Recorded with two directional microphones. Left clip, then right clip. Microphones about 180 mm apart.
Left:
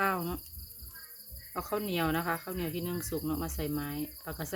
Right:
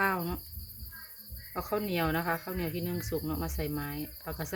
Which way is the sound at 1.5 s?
5° left (ahead or behind).